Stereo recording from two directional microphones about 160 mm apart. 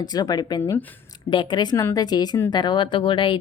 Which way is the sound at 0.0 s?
25° left (ahead or behind).